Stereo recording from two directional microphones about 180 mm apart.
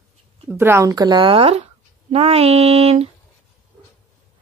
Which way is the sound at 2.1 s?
35° right (ahead or behind).